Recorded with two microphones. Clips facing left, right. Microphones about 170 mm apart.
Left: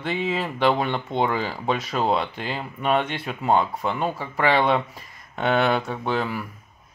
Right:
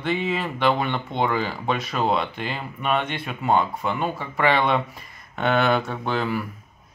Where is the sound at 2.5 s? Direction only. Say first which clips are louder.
Left 3 dB; 25° left (ahead or behind).